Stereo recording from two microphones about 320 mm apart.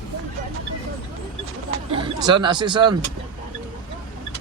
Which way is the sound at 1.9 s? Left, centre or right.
Centre.